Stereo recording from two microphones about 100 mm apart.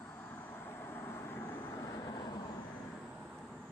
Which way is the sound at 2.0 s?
40° left (ahead or behind).